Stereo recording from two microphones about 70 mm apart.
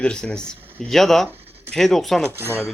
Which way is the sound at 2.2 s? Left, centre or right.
Right.